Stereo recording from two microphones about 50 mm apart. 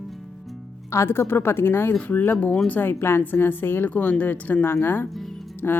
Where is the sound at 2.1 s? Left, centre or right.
Left.